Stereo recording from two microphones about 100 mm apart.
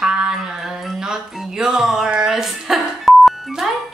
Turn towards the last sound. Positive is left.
turn(degrees=0)  # may be behind; listen again after turning